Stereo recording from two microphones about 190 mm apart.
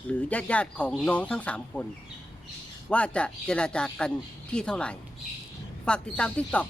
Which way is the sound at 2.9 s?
5° left (ahead or behind).